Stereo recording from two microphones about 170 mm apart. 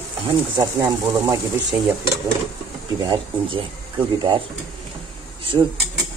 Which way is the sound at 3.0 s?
30° right (ahead or behind).